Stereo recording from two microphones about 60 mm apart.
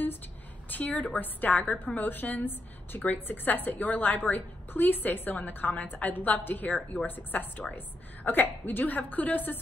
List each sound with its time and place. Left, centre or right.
0.7 s a woman's voice: left